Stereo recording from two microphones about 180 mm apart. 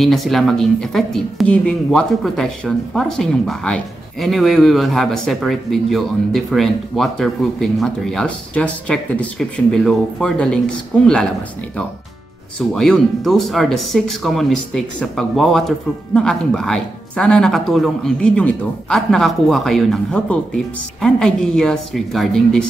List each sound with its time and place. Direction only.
0.0 s speech: centre (ahead or behind)
12.5 s speech: 5° left (ahead or behind)